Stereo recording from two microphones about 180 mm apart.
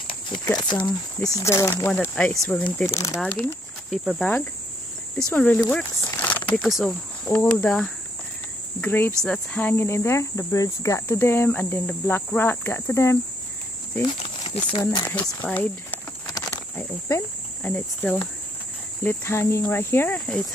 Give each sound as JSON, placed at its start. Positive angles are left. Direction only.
{"t": 0.3, "sound": "speech", "side_deg": 25}
{"t": 1.9, "sound": "speech", "side_deg": 5}
{"t": 2.9, "sound": "speech", "side_deg": 15}
{"t": 3.9, "sound": "speech", "side_deg": -5}
{"t": 14.0, "sound": "speech", "side_deg": 30}
{"t": 15.0, "sound": "speech", "side_deg": 10}
{"t": 16.3, "sound": "a sound", "side_deg": 15}
{"t": 17.6, "sound": "speech", "side_deg": 10}